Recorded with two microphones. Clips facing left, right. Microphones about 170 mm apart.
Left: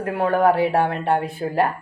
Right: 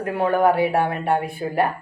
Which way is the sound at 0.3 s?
15° right (ahead or behind).